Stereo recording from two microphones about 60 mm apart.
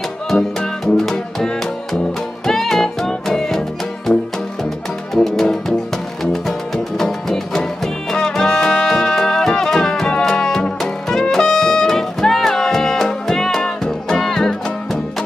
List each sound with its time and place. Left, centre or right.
0.3 s music: centre
5.1 s music: centre